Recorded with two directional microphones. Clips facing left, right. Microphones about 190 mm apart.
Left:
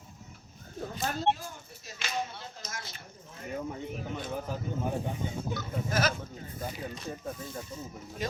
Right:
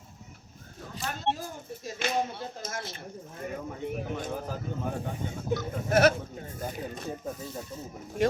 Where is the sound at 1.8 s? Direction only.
50° right (ahead or behind).